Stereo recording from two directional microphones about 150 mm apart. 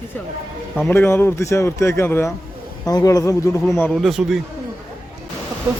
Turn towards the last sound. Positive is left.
turn(degrees=-20)  # may be behind; listen again after turning